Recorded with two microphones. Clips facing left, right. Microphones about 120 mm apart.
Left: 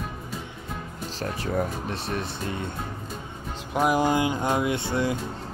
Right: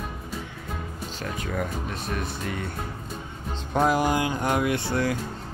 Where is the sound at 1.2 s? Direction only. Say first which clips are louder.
Left 3 dB; 35° left (ahead or behind).